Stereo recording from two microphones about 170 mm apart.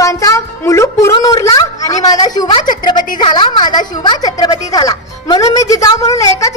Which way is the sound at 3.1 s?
25° left (ahead or behind).